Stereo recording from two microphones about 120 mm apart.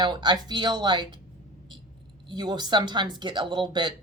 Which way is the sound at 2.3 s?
35° right (ahead or behind).